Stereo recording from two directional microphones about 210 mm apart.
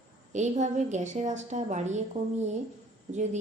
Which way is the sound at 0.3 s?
35° right (ahead or behind).